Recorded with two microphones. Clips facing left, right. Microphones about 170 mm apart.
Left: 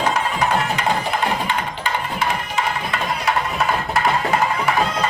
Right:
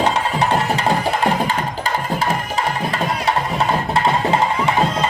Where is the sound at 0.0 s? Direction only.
30° right (ahead or behind).